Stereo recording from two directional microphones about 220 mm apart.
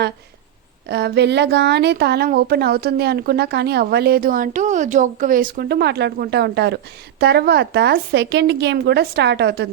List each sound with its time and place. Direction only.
0.9 s a woman's voice: 50° right (ahead or behind)